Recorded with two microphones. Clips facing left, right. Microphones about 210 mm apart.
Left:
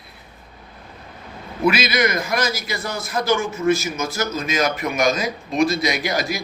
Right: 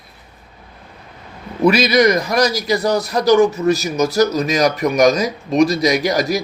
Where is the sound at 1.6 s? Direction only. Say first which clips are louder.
Right 7 dB; 40° right (ahead or behind).